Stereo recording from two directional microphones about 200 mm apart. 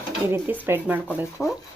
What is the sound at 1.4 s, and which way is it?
Speech, centre (ahead or behind).